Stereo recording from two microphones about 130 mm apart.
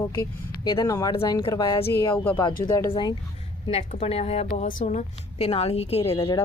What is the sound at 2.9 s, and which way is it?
Speech, 35° left (ahead or behind).